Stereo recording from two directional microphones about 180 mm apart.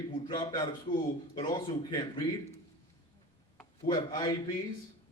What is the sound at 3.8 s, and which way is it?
Speech, 25° left (ahead or behind).